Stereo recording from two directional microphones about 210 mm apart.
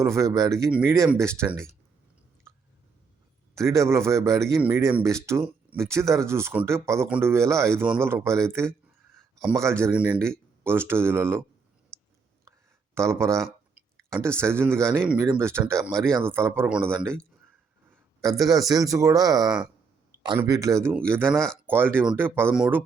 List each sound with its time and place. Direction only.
0.0 s speech: 15° right (ahead or behind)
3.5 s speech: 15° right (ahead or behind)
11.9 s a sound: 5° left (ahead or behind)
12.5 s a sound: 15° right (ahead or behind)
14.6 s speech: 10° right (ahead or behind)
18.2 s a man's voice: 15° right (ahead or behind)
21.3 s speech: 5° left (ahead or behind)
21.7 s speech: 10° right (ahead or behind)